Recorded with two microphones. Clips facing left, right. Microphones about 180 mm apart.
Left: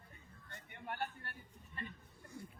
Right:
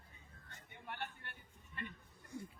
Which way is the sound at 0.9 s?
40° left (ahead or behind).